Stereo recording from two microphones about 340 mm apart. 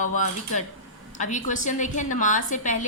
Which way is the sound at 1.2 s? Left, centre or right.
Left.